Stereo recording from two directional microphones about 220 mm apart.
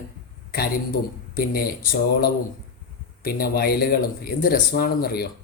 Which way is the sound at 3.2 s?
45° left (ahead or behind).